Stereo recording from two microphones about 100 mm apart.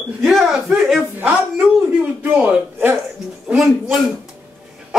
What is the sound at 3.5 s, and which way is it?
Speech, centre (ahead or behind).